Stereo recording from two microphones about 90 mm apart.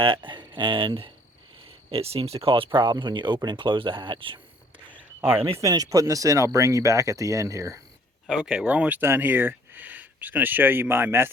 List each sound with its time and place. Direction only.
0.0 s speech: 65° right (ahead or behind)
1.9 s speech: 90° right; by 4.4 s 65° right (ahead or behind)
5.5 s speech: 40° right (ahead or behind)
8.3 s speech: 10° right (ahead or behind); by 11.3 s 25° right (ahead or behind)